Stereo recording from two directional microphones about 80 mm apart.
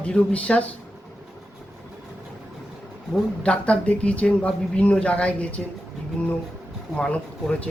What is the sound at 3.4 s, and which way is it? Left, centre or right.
Speech, centre.